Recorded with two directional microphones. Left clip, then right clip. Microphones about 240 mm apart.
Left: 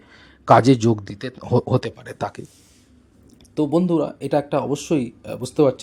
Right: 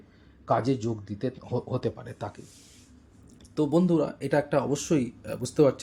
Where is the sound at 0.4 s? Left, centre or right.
Left.